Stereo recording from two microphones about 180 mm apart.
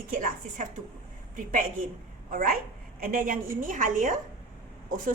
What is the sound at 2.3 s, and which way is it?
A woman's voice, 50° right (ahead or behind).